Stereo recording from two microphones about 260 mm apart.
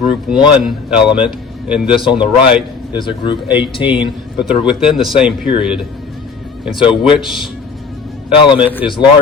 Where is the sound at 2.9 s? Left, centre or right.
Centre.